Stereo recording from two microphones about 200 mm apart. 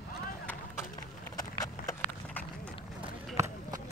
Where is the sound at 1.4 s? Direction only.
15° left (ahead or behind).